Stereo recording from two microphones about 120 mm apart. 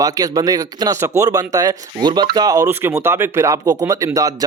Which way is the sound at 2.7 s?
20° right (ahead or behind).